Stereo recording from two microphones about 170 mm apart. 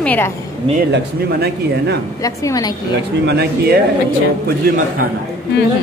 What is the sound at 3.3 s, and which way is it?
Speech, 75° right (ahead or behind).